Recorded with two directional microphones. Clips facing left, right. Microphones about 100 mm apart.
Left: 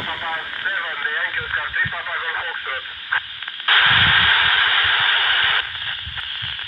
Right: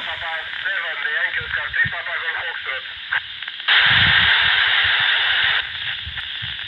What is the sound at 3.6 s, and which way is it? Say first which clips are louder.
Radio: left 1 dB; 45° left (ahead or behind).